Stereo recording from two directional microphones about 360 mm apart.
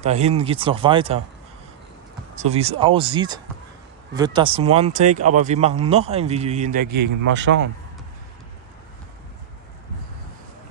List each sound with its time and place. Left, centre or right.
0.0 s speech: centre
2.3 s speech: centre